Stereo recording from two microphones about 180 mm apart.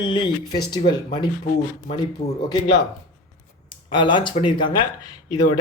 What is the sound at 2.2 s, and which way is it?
Speech, 35° left (ahead or behind).